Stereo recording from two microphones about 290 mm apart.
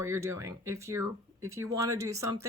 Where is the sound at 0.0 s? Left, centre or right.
Centre.